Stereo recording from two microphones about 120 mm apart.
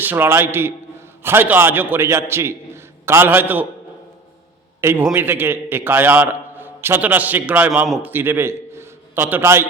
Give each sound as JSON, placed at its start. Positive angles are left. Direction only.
{"t": 0.0, "sound": "a man's voice", "side_deg": -15}
{"t": 4.8, "sound": "a man's voice", "side_deg": -20}